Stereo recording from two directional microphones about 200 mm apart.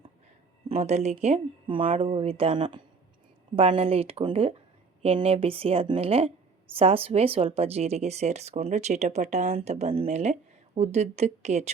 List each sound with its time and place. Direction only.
0.7 s a woman's voice: 35° right (ahead or behind)